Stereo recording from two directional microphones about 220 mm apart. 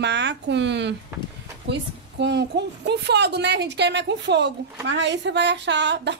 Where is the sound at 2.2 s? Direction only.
50° right (ahead or behind).